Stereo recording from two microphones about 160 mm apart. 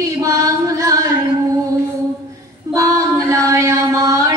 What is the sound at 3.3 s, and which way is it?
Chant, 20° right (ahead or behind).